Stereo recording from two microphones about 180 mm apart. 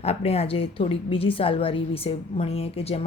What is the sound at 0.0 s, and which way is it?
A woman's voice, 35° left (ahead or behind).